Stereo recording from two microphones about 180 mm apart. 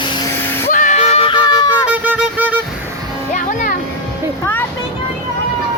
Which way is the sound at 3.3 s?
45° left (ahead or behind).